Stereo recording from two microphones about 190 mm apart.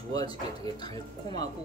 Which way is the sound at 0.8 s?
20° left (ahead or behind).